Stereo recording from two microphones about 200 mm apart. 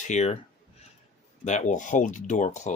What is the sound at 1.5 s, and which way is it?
Speech, 35° left (ahead or behind).